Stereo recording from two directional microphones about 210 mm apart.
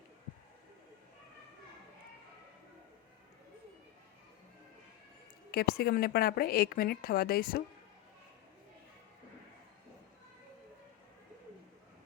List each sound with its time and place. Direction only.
5.5 s a woman's voice: 50° left (ahead or behind)